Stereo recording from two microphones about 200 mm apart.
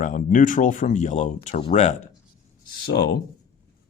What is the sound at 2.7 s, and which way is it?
Speech, 50° left (ahead or behind).